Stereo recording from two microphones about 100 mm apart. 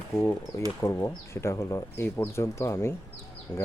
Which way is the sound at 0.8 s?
30° left (ahead or behind).